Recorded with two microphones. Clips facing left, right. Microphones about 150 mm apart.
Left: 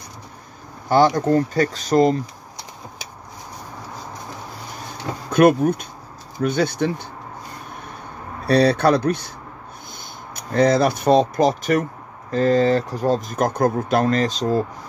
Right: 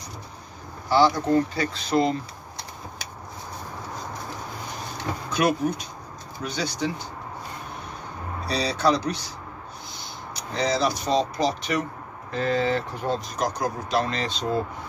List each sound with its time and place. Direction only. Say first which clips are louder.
0.8 s speech: left 4 dB; 50° left (ahead or behind)
5.3 s speech: left 9 dB; 55° left (ahead or behind)
8.5 s speech: left 8 dB; 55° left (ahead or behind)